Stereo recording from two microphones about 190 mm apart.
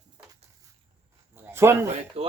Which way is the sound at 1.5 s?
15° right (ahead or behind).